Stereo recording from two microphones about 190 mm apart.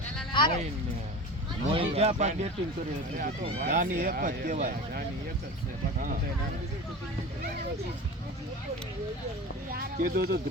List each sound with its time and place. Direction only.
0.3 s speech: 25° left (ahead or behind)
1.7 s speech: 30° right (ahead or behind)
3.2 s speech: 45° right (ahead or behind)
10.0 s speech: 55° right (ahead or behind)